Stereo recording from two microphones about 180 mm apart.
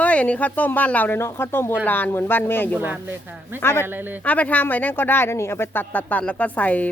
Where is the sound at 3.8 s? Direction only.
10° right (ahead or behind).